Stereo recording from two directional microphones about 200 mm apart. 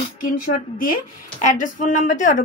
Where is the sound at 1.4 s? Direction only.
40° left (ahead or behind).